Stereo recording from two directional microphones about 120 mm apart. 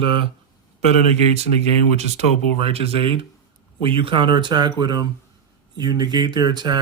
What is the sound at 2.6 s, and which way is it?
Speech, 55° right (ahead or behind).